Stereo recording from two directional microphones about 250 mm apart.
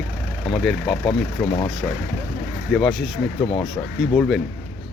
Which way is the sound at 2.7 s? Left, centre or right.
Centre.